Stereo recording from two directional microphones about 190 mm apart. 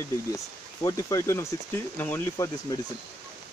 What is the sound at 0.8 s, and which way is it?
Speech, 15° left (ahead or behind).